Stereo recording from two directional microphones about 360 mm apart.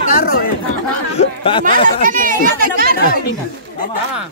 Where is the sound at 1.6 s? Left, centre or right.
Right.